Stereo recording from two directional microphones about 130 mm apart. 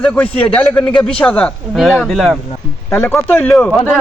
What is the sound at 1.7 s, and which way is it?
Speech, 5° right (ahead or behind).